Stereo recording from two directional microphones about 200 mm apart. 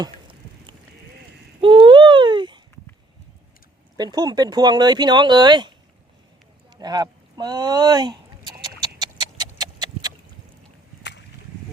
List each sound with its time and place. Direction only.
0.0 s a sound: 25° right (ahead or behind)
3.9 s speech: 20° right (ahead or behind)
6.7 s speech: 20° right (ahead or behind)
8.8 s horse: 20° right (ahead or behind)